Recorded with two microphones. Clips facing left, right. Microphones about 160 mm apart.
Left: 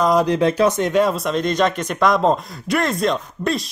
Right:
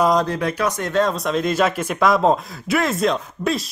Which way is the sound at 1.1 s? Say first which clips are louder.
Even; centre (ahead or behind).